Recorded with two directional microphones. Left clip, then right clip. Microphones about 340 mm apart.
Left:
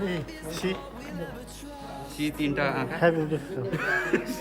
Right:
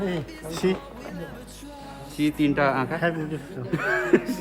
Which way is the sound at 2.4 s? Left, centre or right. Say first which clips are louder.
Right 5 dB; centre.